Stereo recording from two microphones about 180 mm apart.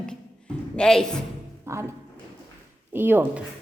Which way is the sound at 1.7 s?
15° right (ahead or behind).